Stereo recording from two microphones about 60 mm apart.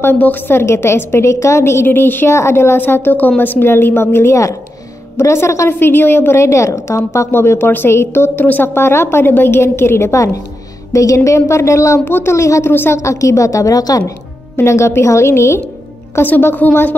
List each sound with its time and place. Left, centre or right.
0.2 s a woman's voice: left
0.6 s a woman's voice: left
2.3 s a woman's voice: left
5.7 s a woman's voice: left
7.2 s a woman's voice: left
10.1 s a woman's voice: left
12.1 s a woman's voice: left
12.4 s a woman's voice: left
12.6 s a woman's voice: left
12.9 s a woman's voice: left
14.6 s a woman's voice: left
16.2 s a woman's voice: left